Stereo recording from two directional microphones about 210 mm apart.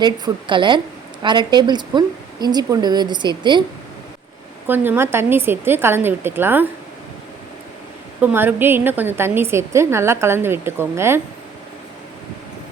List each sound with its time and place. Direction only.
0.0 s a woman's voice: 25° right (ahead or behind)
4.6 s a woman's voice: 10° right (ahead or behind)
8.2 s a woman's voice: 10° right (ahead or behind)